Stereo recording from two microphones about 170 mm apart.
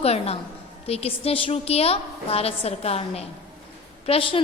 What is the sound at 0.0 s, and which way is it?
A woman's voice, 35° left (ahead or behind).